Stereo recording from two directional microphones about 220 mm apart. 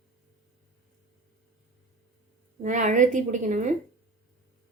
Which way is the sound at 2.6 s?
35° right (ahead or behind).